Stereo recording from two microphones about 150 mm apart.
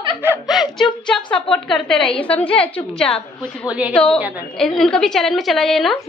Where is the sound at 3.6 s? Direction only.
10° right (ahead or behind).